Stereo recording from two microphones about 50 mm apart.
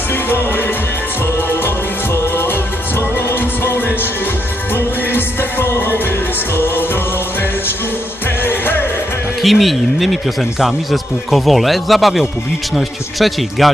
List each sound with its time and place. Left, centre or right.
0.1 s music: left
8.4 s music: left
9.4 s a man's voice: centre